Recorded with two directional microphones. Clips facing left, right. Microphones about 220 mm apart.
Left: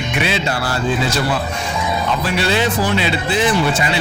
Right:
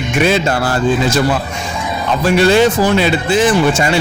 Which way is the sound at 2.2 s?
45° right (ahead or behind).